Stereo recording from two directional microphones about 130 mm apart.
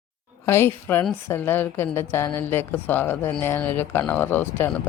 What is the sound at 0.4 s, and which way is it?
A woman's voice, 20° left (ahead or behind).